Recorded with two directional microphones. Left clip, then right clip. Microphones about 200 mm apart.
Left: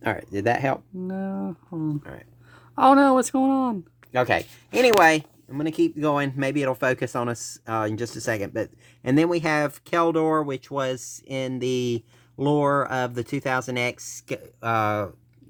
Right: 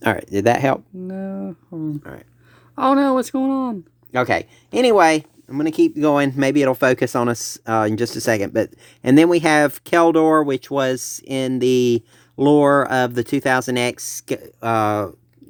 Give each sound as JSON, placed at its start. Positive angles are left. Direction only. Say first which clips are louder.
{"t": 0.0, "sound": "speech", "louder": "right 7 dB", "side_deg": -45}
{"t": 1.0, "sound": "speech", "louder": "right 2 dB", "side_deg": 0}
{"t": 2.1, "sound": "speech", "louder": "right 4 dB", "side_deg": -40}
{"t": 2.7, "sound": "speech", "louder": "even", "side_deg": 0}
{"t": 4.1, "sound": "speech", "louder": "right 3 dB", "side_deg": -40}